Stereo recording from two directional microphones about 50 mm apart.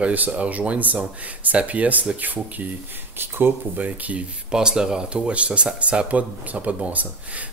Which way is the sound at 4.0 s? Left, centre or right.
Right.